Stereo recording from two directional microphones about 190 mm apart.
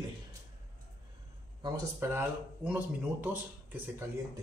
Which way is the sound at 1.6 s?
20° right (ahead or behind).